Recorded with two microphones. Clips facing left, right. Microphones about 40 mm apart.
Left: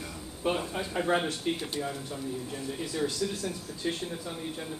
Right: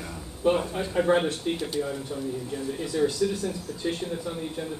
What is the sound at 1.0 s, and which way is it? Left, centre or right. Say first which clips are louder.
Speech: right 5 dB; centre.